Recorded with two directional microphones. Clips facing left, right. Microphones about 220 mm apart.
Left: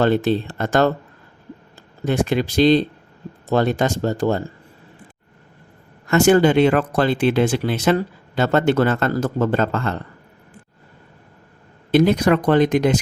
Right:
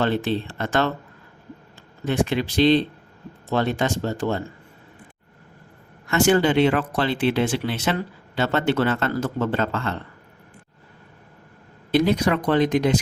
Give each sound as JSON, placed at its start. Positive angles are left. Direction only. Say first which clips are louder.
{"t": 0.0, "sound": "speech", "louder": "left 5 dB", "side_deg": 40}
{"t": 2.0, "sound": "speech", "louder": "left 3 dB", "side_deg": 40}
{"t": 6.1, "sound": "speech", "louder": "left 4 dB", "side_deg": 45}
{"t": 11.9, "sound": "speech", "louder": "left 4 dB", "side_deg": 50}